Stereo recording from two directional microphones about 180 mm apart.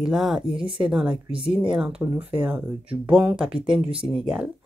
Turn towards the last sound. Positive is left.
turn(degrees=-5)  # may be behind; listen again after turning